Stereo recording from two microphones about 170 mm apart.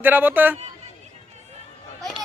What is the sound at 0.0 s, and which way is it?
Speech, 10° right (ahead or behind).